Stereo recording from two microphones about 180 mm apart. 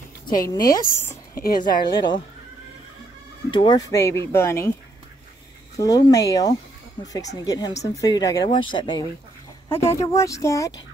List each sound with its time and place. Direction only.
0.4 s speech: 20° left (ahead or behind)
3.5 s speech: 25° left (ahead or behind)
5.8 s speech: 20° left (ahead or behind)
9.7 s speech: 15° left (ahead or behind)